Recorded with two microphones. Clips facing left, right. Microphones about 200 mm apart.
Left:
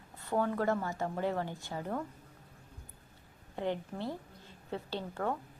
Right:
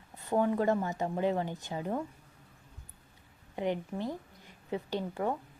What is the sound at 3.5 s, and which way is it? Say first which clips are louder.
A woman's voice: right 3 dB; 15° right (ahead or behind).